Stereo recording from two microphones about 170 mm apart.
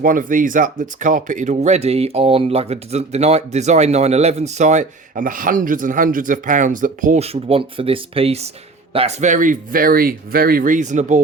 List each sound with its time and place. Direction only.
0.0 s speech: 50° right (ahead or behind)